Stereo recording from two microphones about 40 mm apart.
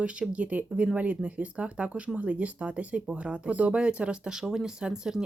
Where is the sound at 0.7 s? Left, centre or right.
Right.